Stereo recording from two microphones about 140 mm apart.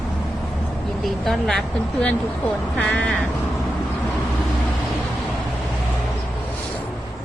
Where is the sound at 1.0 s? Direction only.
Centre (ahead or behind).